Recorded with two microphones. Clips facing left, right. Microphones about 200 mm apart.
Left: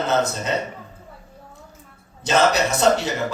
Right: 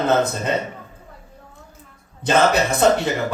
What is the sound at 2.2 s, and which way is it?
Speech, 55° right (ahead or behind).